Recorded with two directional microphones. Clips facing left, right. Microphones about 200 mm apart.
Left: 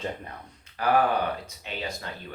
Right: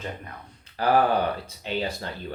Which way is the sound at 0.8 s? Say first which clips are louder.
Right 2 dB; 30° right (ahead or behind).